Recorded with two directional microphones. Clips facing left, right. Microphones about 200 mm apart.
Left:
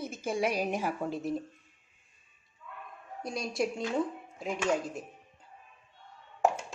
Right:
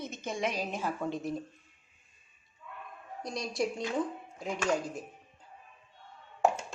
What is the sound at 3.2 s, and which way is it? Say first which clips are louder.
Speech: left 1 dB; 5° left (ahead or behind).